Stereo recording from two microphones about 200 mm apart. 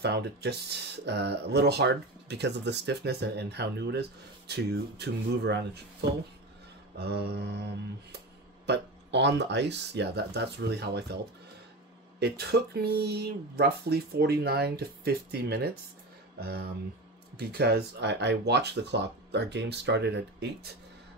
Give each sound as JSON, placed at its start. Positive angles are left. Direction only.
{"t": 0.0, "sound": "speech", "side_deg": -55}
{"t": 8.6, "sound": "a sound", "side_deg": -60}
{"t": 9.4, "sound": "speech", "side_deg": -60}
{"t": 12.2, "sound": "speech", "side_deg": -55}